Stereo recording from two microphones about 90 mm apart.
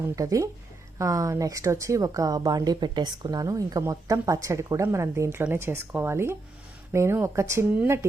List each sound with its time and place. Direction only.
0.2 s speech: 35° right (ahead or behind)